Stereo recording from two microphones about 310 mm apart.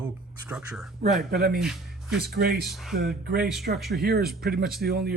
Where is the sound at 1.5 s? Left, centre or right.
Centre.